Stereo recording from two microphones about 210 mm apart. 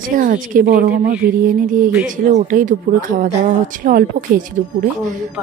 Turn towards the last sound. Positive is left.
turn(degrees=-40)  # may be behind; listen again after turning